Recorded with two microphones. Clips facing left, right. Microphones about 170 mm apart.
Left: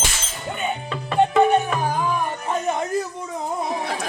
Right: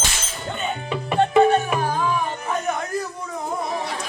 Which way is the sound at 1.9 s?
15° left (ahead or behind).